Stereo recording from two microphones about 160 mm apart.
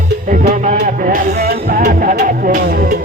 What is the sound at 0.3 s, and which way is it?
Music, 60° right (ahead or behind).